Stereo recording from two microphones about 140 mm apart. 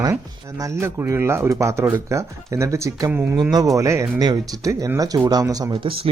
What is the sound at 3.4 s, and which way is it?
Speech, 30° right (ahead or behind).